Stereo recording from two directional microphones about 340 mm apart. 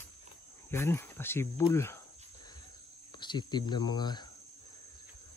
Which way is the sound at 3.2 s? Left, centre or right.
Centre.